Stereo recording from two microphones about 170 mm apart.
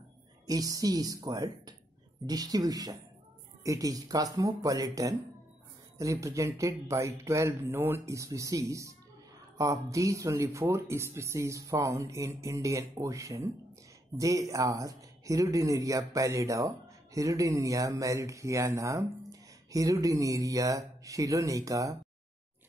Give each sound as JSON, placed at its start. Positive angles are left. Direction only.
{"t": 0.5, "sound": "speech", "side_deg": -20}